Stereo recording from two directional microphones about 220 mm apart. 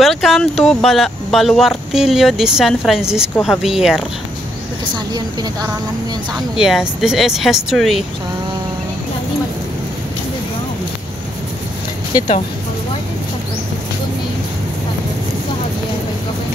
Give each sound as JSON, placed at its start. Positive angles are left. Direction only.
{"t": 0.0, "sound": "speech", "side_deg": 0}
{"t": 4.8, "sound": "a woman's voice", "side_deg": -20}
{"t": 6.5, "sound": "speech", "side_deg": 0}